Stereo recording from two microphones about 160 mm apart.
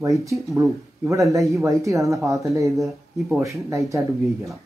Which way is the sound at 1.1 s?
20° right (ahead or behind).